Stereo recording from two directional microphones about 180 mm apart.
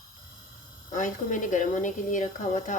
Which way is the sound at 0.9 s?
45° left (ahead or behind).